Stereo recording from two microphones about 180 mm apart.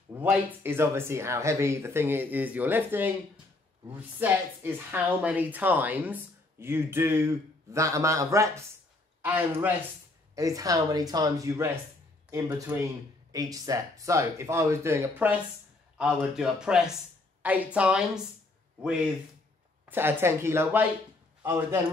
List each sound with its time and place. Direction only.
0.2 s speech: 10° right (ahead or behind)
4.2 s speech: 10° right (ahead or behind)
19.9 s speech: 10° right (ahead or behind)